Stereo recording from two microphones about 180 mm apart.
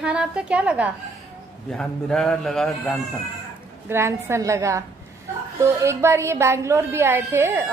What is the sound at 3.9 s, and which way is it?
A woman's voice, 15° right (ahead or behind).